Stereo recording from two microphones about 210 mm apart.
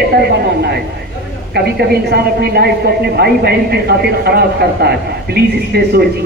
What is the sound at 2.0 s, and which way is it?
A man's voice, 50° right (ahead or behind).